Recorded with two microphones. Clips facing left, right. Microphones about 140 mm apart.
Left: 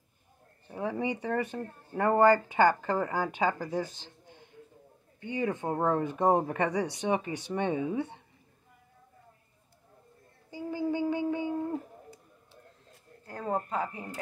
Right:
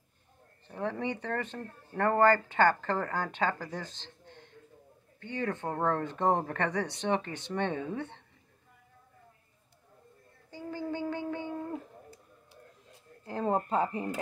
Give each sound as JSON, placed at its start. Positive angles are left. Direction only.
{"t": 0.7, "sound": "speech", "side_deg": 10}
{"t": 10.5, "sound": "a sound", "side_deg": 10}
{"t": 13.2, "sound": "speech", "side_deg": -25}